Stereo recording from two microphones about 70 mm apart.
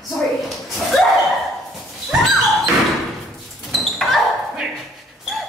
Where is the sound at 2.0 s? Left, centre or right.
Centre.